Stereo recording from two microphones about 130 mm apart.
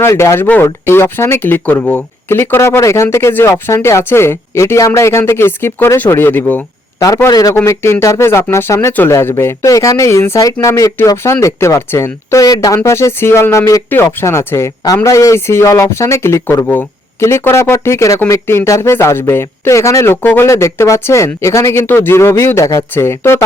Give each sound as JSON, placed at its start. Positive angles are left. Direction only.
{"t": 0.0, "sound": "speech", "side_deg": 20}
{"t": 7.3, "sound": "speech", "side_deg": 30}